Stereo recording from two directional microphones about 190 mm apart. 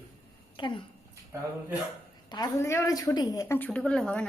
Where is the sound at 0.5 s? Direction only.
25° left (ahead or behind).